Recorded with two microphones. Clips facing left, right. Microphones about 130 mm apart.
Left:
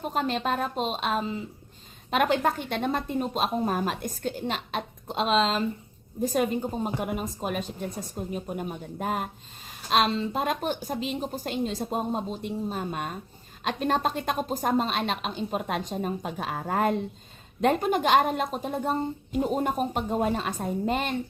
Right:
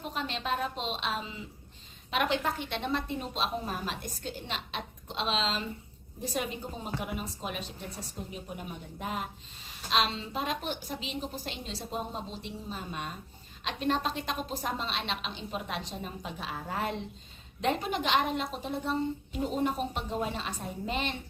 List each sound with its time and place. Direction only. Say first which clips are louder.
0.0 s a woman's voice: left 8 dB; 45° left (ahead or behind)